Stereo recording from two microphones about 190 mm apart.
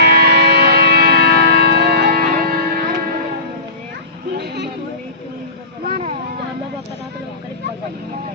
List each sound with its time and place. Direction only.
0.0 s music: 60° right (ahead or behind)
4.4 s a sound: 65° right (ahead or behind)
5.9 s vehicle: 40° right (ahead or behind)